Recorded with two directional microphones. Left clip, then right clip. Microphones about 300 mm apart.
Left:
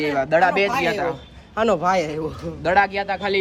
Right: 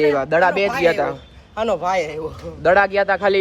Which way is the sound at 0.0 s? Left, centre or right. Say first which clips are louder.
Right 2 dB; centre.